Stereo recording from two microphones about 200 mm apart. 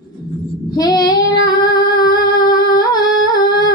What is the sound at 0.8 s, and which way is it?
Child singing, 20° left (ahead or behind).